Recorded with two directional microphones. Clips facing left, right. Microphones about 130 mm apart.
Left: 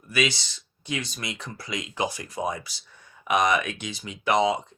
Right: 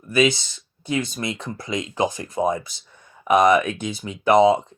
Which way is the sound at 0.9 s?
30° right (ahead or behind).